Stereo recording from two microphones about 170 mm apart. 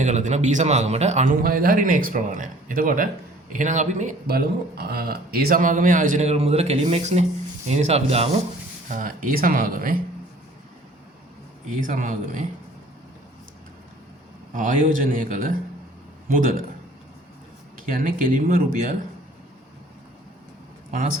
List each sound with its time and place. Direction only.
0.0 s speech: 45° right (ahead or behind)
1.4 s speech: 60° right (ahead or behind)
4.3 s speech: 65° right (ahead or behind); by 8.4 s 35° right (ahead or behind)
8.9 s speech: 50° right (ahead or behind)
11.8 s speech: 50° right (ahead or behind)
14.5 s speech: 50° right (ahead or behind)
17.9 s speech: 55° right (ahead or behind)